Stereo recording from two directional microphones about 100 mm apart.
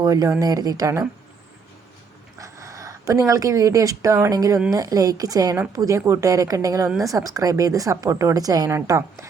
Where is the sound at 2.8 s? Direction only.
35° right (ahead or behind).